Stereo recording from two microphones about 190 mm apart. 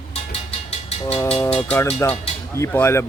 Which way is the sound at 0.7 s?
30° left (ahead or behind).